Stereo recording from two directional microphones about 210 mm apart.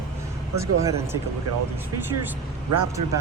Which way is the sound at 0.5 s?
15° right (ahead or behind).